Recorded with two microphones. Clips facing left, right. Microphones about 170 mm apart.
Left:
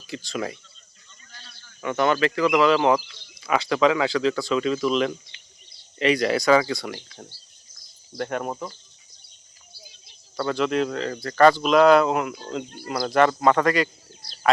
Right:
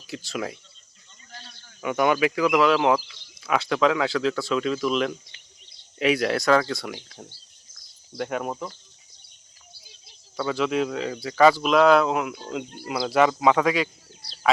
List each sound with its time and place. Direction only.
0.1 s speech: 5° right (ahead or behind)
1.8 s speech: 10° right (ahead or behind)
5.3 s a sound: 45° right (ahead or behind)
6.0 s speech: 5° right (ahead or behind)
8.1 s speech: 5° right (ahead or behind)
10.3 s speech: centre (ahead or behind)